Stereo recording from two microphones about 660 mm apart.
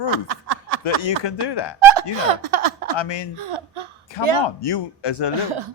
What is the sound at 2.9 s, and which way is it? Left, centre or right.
Speech, left.